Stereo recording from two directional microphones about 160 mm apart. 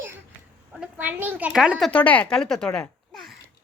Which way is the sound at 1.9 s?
10° left (ahead or behind).